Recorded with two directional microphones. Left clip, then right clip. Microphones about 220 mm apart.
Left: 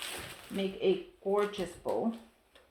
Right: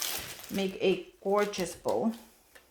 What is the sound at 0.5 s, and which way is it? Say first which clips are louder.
Speech: right 2 dB; 50° right (ahead or behind).